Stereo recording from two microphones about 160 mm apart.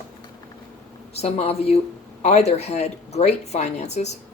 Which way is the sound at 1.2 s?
40° left (ahead or behind).